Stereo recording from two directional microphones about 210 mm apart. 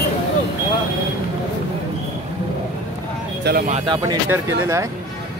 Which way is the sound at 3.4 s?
45° right (ahead or behind).